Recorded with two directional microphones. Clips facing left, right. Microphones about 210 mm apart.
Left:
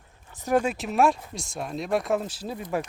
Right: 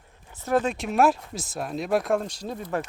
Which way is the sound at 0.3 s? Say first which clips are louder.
Even; 15° left (ahead or behind).